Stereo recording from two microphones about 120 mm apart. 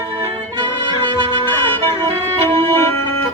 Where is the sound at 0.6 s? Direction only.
40° right (ahead or behind).